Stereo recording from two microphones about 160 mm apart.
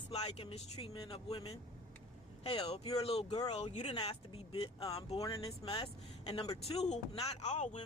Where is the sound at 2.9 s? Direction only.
40° left (ahead or behind).